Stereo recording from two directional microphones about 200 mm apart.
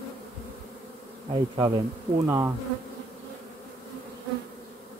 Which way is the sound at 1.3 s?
25° right (ahead or behind).